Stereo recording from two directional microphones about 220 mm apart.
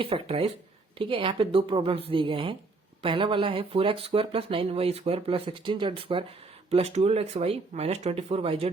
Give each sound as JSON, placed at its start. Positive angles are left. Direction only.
{"t": 0.0, "sound": "speech", "side_deg": -25}